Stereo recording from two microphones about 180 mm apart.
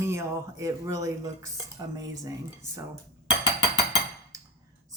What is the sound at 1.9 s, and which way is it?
Speech, 20° right (ahead or behind).